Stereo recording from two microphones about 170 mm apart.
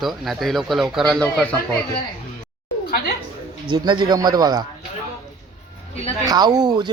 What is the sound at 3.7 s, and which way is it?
Speech, 25° right (ahead or behind).